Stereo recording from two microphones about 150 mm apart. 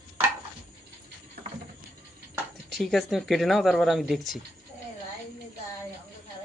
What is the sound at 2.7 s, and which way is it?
Speech, centre (ahead or behind).